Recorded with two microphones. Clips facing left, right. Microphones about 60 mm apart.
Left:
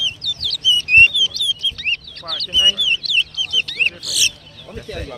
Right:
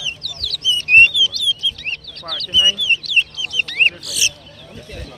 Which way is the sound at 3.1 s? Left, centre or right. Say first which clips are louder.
Right 1 dB; right.